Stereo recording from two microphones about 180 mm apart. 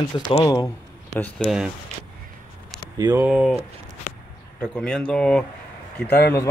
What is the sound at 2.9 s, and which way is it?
Speech, 20° right (ahead or behind).